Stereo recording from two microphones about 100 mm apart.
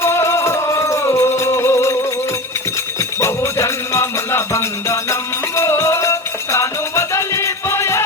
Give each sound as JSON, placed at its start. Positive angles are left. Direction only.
{"t": 0.0, "sound": "music", "side_deg": 25}
{"t": 3.0, "sound": "music", "side_deg": 30}